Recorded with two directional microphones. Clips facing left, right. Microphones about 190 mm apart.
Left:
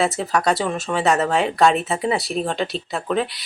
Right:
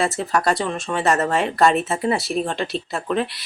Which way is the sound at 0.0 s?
Centre (ahead or behind).